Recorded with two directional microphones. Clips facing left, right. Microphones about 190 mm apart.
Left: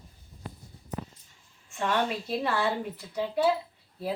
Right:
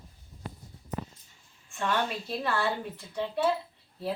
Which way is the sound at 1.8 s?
20° left (ahead or behind).